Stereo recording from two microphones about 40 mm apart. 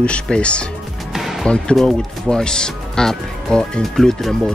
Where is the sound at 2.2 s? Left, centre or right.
Centre.